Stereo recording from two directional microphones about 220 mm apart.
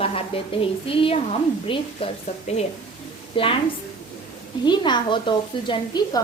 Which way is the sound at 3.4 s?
25° left (ahead or behind).